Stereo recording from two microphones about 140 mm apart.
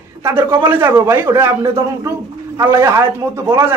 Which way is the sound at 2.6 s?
20° right (ahead or behind).